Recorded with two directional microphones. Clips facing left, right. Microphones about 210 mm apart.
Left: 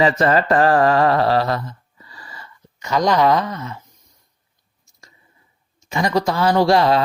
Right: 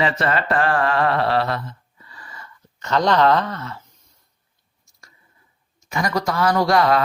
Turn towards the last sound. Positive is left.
turn(degrees=25)  # may be behind; listen again after turning